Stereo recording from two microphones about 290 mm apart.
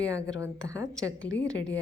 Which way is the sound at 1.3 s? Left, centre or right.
Left.